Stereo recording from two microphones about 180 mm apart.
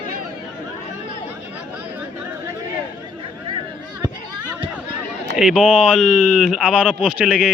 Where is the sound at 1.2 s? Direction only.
10° right (ahead or behind).